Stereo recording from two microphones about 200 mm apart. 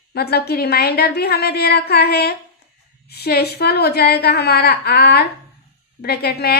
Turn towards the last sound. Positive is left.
turn(degrees=50)  # may be behind; listen again after turning